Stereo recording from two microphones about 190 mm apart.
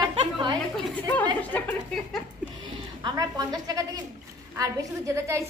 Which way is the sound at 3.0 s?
20° right (ahead or behind).